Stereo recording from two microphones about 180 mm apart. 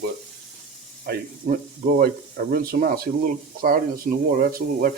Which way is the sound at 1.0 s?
55° right (ahead or behind).